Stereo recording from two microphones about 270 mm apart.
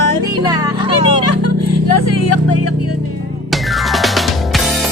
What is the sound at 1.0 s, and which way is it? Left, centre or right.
Music, left.